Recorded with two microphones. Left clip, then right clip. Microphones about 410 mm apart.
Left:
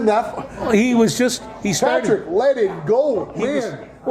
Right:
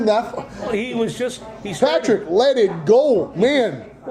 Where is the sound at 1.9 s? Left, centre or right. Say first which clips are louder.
Right 1 dB; right.